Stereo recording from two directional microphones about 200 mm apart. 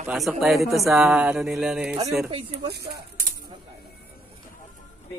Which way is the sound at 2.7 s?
55° right (ahead or behind).